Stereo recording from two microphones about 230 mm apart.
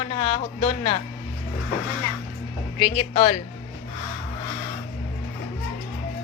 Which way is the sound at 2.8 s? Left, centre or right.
Left.